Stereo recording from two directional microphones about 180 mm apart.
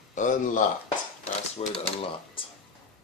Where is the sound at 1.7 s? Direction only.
30° left (ahead or behind).